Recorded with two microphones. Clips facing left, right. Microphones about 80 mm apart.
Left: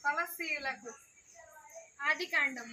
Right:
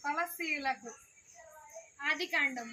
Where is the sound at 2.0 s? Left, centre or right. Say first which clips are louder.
Left 1 dB; left.